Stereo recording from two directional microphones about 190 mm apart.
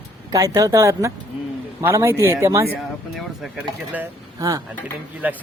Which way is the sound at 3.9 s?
10° right (ahead or behind).